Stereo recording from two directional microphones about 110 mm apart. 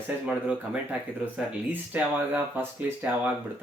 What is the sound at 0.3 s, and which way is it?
Speech, 10° right (ahead or behind).